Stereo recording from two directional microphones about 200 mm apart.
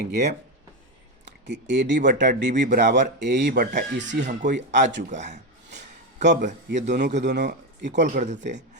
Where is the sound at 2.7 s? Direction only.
60° right (ahead or behind).